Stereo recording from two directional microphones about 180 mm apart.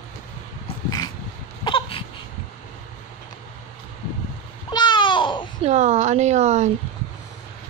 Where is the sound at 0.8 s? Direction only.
20° left (ahead or behind).